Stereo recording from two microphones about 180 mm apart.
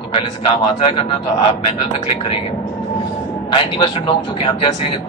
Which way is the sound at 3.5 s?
30° left (ahead or behind).